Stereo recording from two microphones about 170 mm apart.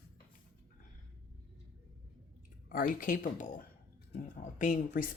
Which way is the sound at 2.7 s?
55° left (ahead or behind).